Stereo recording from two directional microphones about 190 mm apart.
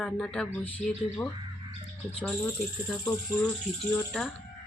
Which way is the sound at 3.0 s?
15° left (ahead or behind).